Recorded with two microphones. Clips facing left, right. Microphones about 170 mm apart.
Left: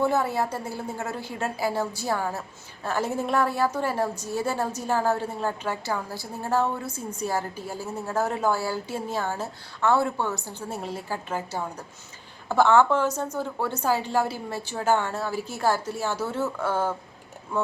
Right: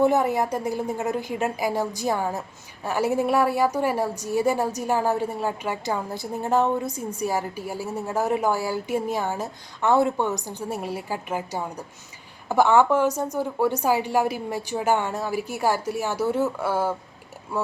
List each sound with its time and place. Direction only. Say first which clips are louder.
0.0 s a woman's voice: right 4 dB; 15° right (ahead or behind)